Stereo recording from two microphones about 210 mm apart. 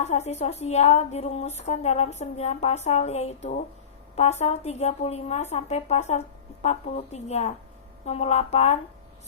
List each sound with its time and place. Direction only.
0.0 s a woman's voice: 30° left (ahead or behind)